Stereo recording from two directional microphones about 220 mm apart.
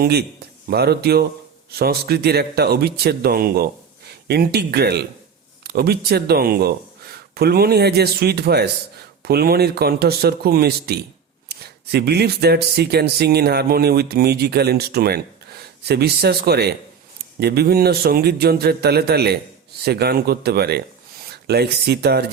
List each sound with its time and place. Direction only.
0.0 s speech: 45° right (ahead or behind)